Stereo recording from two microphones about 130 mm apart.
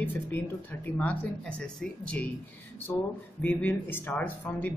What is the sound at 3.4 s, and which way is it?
Speech, 15° left (ahead or behind).